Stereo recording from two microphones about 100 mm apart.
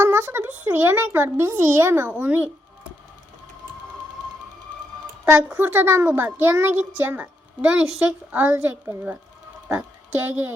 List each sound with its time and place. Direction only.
0.0 s a child's voice: 20° right (ahead or behind)
5.2 s a child's voice: 20° right (ahead or behind)